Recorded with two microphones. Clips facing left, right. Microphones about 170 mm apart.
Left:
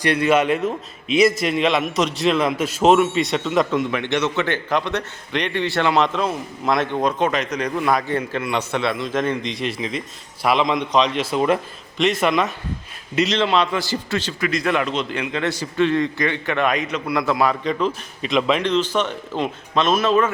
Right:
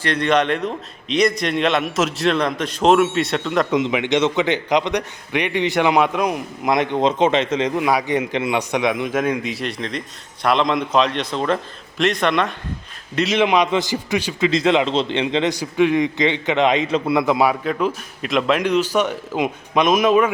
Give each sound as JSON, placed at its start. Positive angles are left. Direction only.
{"t": 0.0, "sound": "a man's voice", "side_deg": 10}
{"t": 3.7, "sound": "a man's voice", "side_deg": -20}
{"t": 7.8, "sound": "a man's voice", "side_deg": -10}
{"t": 13.3, "sound": "a man's voice", "side_deg": -15}
{"t": 14.4, "sound": "a man's voice", "side_deg": -20}
{"t": 17.4, "sound": "a man's voice", "side_deg": -5}